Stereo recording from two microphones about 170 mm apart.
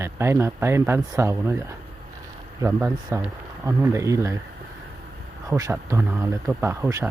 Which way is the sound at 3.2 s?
15° right (ahead or behind).